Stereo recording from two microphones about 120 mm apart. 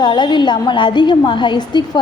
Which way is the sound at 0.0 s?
40° left (ahead or behind).